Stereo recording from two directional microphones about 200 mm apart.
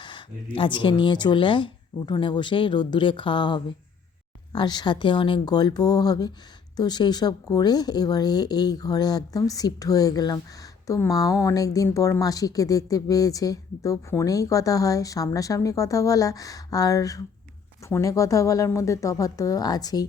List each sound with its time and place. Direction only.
0.0 s a woman's voice: 25° left (ahead or behind)